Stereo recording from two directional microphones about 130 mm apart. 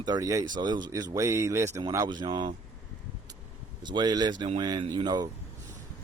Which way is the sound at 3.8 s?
35° right (ahead or behind).